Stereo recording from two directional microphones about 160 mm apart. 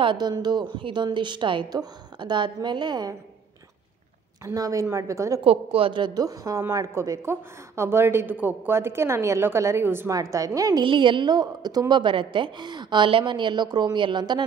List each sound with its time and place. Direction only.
0.0 s a woman's voice: 30° right (ahead or behind)
4.5 s a woman's voice: 20° right (ahead or behind)
5.4 s a woman's voice: 35° right (ahead or behind)